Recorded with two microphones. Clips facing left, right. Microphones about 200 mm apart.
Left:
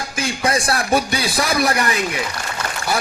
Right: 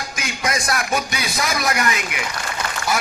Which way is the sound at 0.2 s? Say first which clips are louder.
Left 5 dB; 30° left (ahead or behind).